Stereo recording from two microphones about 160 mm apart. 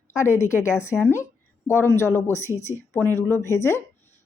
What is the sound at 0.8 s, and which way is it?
Speech, 15° left (ahead or behind).